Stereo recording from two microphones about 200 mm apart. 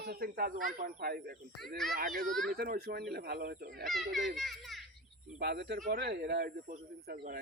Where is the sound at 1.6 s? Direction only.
Centre (ahead or behind).